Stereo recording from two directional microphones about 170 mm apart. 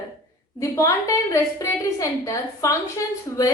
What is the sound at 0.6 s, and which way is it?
A woman's voice, 20° left (ahead or behind).